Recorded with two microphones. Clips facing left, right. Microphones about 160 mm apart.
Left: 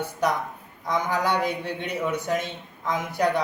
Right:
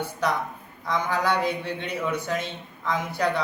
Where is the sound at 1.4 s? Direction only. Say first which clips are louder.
Even; 45° left (ahead or behind).